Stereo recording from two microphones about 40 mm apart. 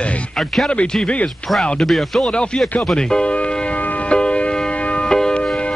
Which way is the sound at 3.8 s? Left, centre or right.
Left.